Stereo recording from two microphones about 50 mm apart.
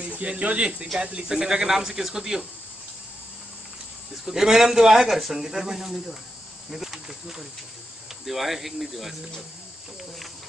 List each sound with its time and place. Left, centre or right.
0.0 s speech: right; by 2.4 s centre
4.3 s speech: centre